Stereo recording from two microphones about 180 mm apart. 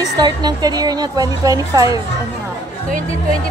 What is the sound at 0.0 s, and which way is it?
A woman's voice, 25° right (ahead or behind).